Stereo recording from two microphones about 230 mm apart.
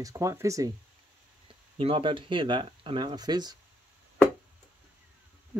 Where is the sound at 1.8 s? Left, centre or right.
Right.